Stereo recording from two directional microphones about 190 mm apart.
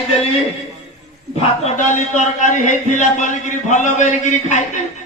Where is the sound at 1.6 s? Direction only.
40° left (ahead or behind).